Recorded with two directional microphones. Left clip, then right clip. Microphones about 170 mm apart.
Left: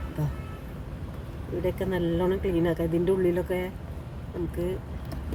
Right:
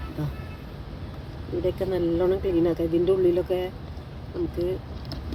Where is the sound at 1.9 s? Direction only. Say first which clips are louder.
Right 4 dB; 15° left (ahead or behind).